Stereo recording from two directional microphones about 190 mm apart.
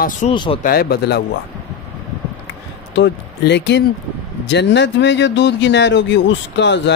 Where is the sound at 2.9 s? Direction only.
65° left (ahead or behind).